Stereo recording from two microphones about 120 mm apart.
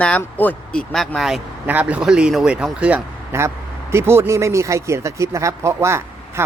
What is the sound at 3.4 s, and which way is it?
Speech, 20° right (ahead or behind).